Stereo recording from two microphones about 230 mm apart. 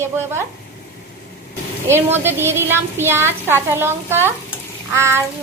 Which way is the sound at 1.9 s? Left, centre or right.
Centre.